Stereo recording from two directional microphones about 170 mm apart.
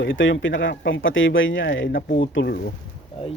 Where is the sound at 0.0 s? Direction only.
90° left.